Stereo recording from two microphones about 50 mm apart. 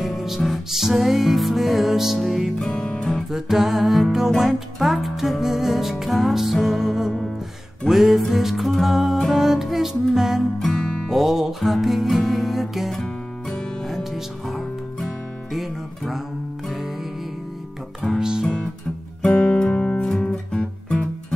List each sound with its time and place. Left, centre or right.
0.0 s music: centre
2.7 s music: centre
3.3 s music: centre
10.6 s music: centre
11.1 s music: centre
12.9 s music: centre
13.8 s music: centre
18.0 s music: centre
19.2 s guitar: left
20.2 s music: centre